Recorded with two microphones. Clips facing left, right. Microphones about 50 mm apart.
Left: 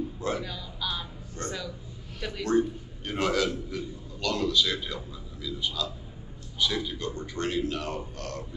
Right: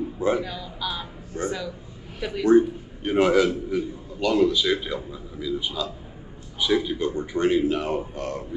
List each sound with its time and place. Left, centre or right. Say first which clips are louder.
0.2 s a man's voice: right 11 dB; centre